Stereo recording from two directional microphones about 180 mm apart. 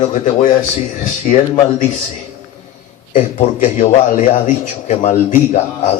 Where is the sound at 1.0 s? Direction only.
45° left (ahead or behind).